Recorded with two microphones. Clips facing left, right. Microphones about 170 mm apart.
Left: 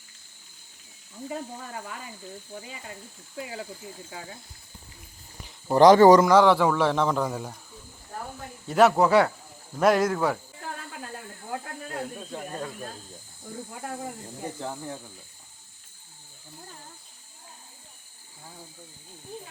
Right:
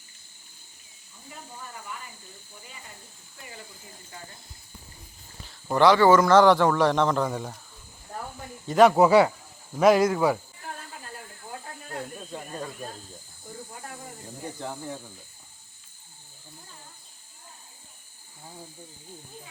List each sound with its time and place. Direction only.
1.3 s speech: 85° left
5.7 s speech: 40° left (ahead or behind)
6.2 s a man's voice: 5° left (ahead or behind)
8.6 s speech: 5° left (ahead or behind)
9.0 s a man's voice: 5° right (ahead or behind)
12.3 s a man's voice: centre (ahead or behind)
14.6 s a man's voice: centre (ahead or behind)